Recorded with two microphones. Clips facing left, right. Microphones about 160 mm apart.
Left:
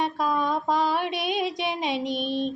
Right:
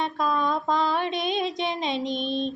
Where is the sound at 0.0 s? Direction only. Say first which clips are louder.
Even; 10° left (ahead or behind).